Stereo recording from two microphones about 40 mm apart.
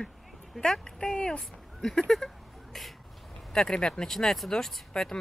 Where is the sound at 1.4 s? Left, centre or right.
Centre.